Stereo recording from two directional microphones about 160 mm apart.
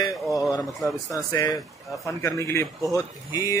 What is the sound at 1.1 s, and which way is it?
Speech, 25° left (ahead or behind).